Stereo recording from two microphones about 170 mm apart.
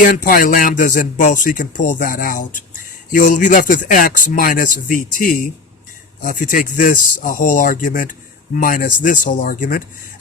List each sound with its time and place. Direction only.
0.0 s speech: 50° left (ahead or behind)